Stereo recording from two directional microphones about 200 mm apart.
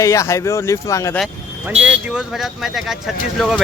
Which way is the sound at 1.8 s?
5° right (ahead or behind).